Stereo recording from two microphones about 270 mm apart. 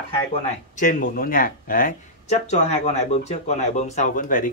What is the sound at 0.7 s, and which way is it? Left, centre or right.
Speech, left.